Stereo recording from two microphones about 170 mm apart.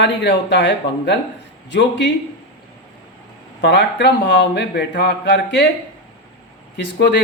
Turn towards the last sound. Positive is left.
turn(degrees=80)